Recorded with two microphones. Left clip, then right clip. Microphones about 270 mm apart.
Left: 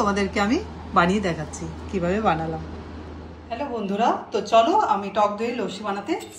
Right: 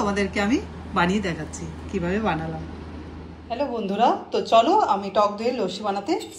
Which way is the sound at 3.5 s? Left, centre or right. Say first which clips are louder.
Right 2 dB; right.